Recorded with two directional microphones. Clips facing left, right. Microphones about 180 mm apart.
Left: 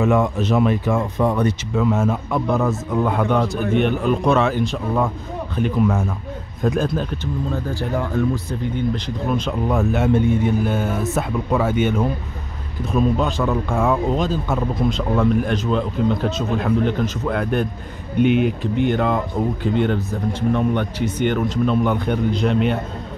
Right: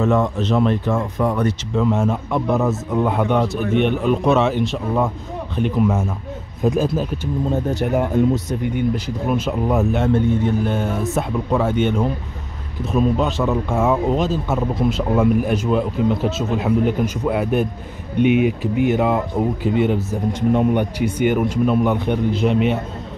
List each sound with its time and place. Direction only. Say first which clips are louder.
0.0 s speech: even; 10° left (ahead or behind)
1.1 s speech: left 1 dB; 20° left (ahead or behind)
1.7 s a man's voice: right 2 dB; centre (ahead or behind)
7.5 s speech: right 6 dB; 20° right (ahead or behind)
8.9 s a man's voice: right 1 dB; 10° right (ahead or behind)
10.0 s a man's voice: even; 10° left (ahead or behind); by 20.2 s 5° right (ahead or behind)
20.3 s a man's voice: right 3 dB; 15° right (ahead or behind)